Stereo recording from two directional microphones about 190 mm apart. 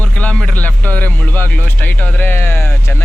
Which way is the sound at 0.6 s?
10° left (ahead or behind).